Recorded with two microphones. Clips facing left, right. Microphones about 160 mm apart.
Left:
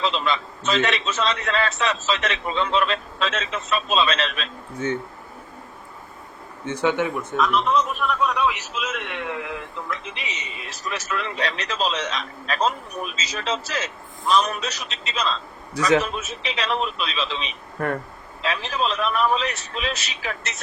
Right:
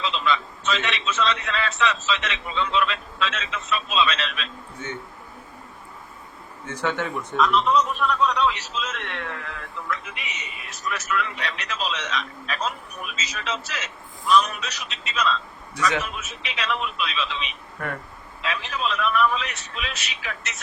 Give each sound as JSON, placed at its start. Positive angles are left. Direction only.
{"t": 0.0, "sound": "a man's voice", "side_deg": 40}
{"t": 6.7, "sound": "a man's voice", "side_deg": 15}
{"t": 7.3, "sound": "a man's voice", "side_deg": 0}